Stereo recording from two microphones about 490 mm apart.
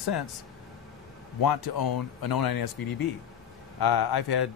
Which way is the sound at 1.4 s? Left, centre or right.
Left.